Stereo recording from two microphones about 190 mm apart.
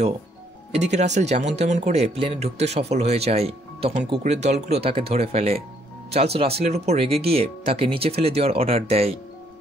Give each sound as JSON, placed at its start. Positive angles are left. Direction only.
{"t": 0.7, "sound": "speech", "side_deg": -35}